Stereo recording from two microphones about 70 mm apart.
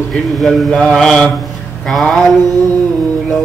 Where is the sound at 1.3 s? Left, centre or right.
Centre.